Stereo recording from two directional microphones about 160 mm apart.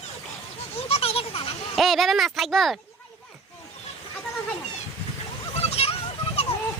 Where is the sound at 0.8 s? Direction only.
40° left (ahead or behind).